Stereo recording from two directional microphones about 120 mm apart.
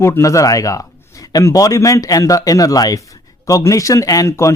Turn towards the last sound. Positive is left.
turn(degrees=25)  # may be behind; listen again after turning